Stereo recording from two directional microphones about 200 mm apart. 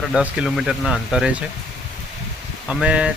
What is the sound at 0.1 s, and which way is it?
Speech, 5° right (ahead or behind).